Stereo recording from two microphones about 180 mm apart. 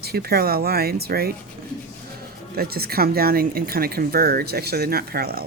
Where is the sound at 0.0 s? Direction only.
60° right (ahead or behind).